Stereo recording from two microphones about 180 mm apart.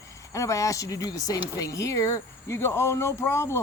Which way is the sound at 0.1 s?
15° left (ahead or behind).